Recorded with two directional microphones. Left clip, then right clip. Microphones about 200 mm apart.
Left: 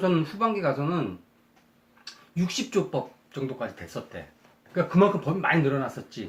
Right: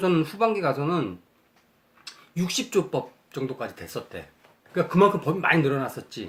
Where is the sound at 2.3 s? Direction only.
45° right (ahead or behind).